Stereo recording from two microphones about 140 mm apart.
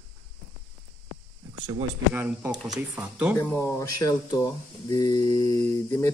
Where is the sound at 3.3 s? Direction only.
15° left (ahead or behind).